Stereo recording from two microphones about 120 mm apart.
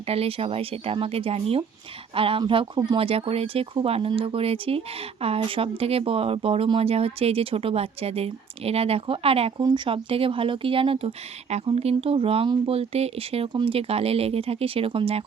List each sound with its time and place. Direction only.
0.1 s speech: 55° right (ahead or behind)
9.6 s speech: 40° right (ahead or behind); by 13.5 s 55° right (ahead or behind)
13.5 s speech: 40° right (ahead or behind)
13.7 s speech: 55° right (ahead or behind)